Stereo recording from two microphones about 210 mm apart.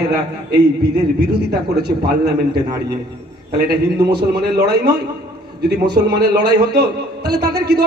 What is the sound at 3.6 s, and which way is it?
A man's voice, 50° right (ahead or behind).